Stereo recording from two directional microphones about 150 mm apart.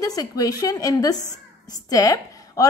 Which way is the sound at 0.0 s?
25° left (ahead or behind).